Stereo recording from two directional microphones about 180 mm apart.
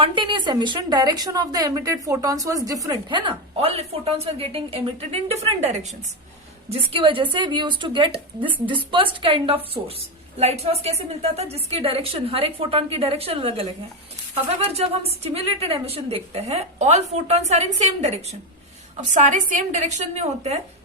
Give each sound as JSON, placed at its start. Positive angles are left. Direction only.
{"t": 0.0, "sound": "a woman's voice", "side_deg": -25}
{"t": 14.7, "sound": "a woman's voice", "side_deg": -35}